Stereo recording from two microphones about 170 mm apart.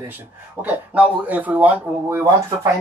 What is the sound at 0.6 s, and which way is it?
Speech, 10° right (ahead or behind).